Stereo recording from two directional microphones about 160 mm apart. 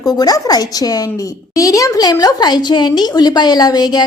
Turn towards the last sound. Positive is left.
turn(degrees=25)  # may be behind; listen again after turning